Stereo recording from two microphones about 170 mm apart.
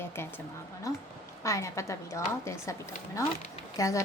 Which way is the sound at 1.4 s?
20° left (ahead or behind).